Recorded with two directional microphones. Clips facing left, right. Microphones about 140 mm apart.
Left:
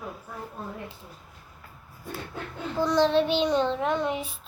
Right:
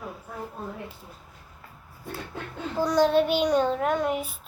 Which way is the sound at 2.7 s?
10° right (ahead or behind).